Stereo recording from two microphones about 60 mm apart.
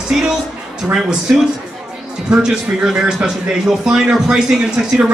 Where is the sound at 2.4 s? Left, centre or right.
Centre.